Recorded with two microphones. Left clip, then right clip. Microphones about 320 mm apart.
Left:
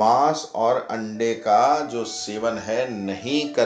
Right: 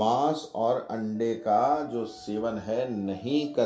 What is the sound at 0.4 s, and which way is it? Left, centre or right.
Speech, left.